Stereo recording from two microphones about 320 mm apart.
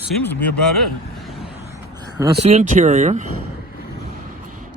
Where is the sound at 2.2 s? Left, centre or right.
Centre.